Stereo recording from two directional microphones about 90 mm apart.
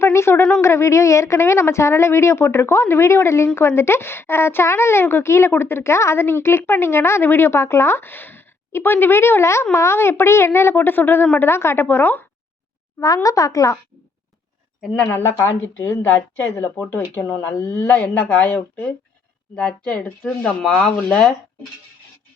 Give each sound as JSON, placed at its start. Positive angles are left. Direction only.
{"t": 0.0, "sound": "a woman's voice", "side_deg": 30}
{"t": 13.2, "sound": "speech", "side_deg": 40}
{"t": 15.4, "sound": "a woman's voice", "side_deg": 35}
{"t": 20.2, "sound": "speech", "side_deg": 5}